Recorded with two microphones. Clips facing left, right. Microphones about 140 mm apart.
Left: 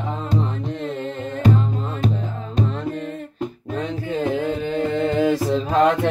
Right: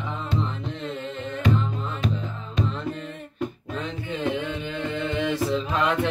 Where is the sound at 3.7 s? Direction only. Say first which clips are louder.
Left 8 dB; 40° left (ahead or behind).